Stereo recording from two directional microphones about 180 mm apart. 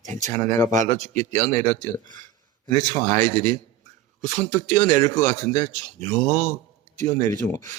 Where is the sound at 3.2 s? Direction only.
45° right (ahead or behind).